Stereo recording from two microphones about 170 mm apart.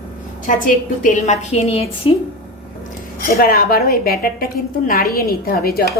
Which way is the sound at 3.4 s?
60° left (ahead or behind).